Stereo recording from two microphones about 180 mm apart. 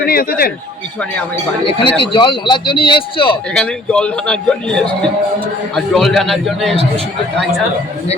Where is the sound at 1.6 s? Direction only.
30° left (ahead or behind).